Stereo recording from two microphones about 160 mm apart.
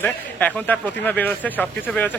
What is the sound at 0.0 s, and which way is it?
Speech, 10° left (ahead or behind).